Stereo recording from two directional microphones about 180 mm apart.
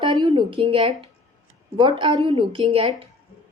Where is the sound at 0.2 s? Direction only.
25° right (ahead or behind).